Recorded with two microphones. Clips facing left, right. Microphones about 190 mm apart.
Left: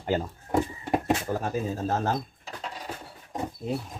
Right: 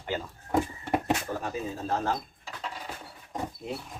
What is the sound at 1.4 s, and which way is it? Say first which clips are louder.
Speech: left 4 dB; 45° left (ahead or behind).